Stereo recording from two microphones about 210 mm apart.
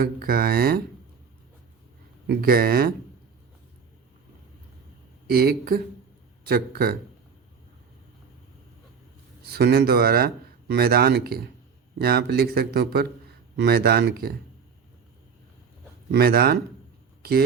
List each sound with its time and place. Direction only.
0.0 s speech: 45° right (ahead or behind)
2.2 s speech: 45° right (ahead or behind)
5.3 s speech: 45° right (ahead or behind)
9.5 s speech: 50° right (ahead or behind)
16.1 s speech: 45° right (ahead or behind)